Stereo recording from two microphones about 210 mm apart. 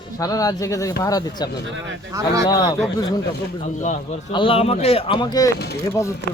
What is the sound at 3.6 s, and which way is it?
Speech, 35° left (ahead or behind).